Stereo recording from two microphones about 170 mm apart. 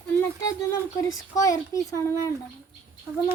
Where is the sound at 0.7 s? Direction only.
20° left (ahead or behind).